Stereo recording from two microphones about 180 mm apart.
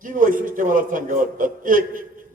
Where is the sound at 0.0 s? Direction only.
50° right (ahead or behind).